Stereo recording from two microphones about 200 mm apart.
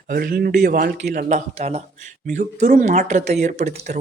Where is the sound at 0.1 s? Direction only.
45° right (ahead or behind).